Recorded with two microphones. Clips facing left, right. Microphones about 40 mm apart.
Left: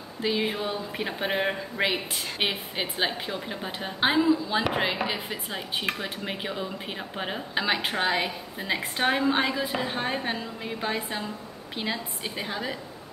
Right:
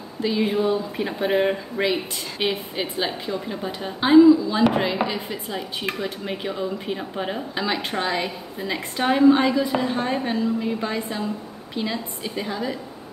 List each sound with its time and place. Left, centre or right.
0.2 s a woman's voice: centre
0.9 s speech: centre
1.8 s a woman's voice: centre